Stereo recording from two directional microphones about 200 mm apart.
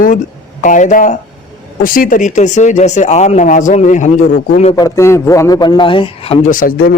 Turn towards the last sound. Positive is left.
turn(degrees=45)  # may be behind; listen again after turning